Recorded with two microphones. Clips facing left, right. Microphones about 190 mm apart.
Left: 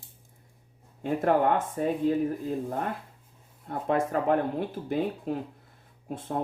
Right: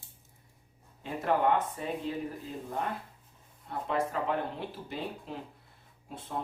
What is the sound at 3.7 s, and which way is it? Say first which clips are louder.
Speech: left 5 dB; 50° left (ahead or behind).